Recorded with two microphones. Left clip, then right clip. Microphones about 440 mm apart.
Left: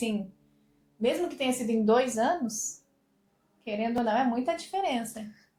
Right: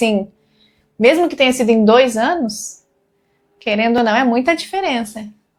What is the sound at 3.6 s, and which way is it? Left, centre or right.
A woman's voice, right.